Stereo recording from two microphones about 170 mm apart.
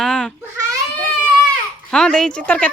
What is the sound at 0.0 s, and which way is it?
Babbling, 5° left (ahead or behind).